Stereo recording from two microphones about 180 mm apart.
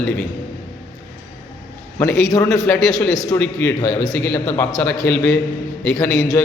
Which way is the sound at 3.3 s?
15° left (ahead or behind).